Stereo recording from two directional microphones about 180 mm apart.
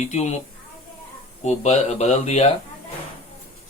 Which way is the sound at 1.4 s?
40° left (ahead or behind).